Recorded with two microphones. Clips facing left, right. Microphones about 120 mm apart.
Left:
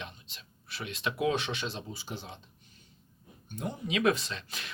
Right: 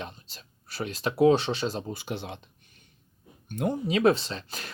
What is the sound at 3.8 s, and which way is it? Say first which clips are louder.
Speech: right 4 dB; 35° right (ahead or behind).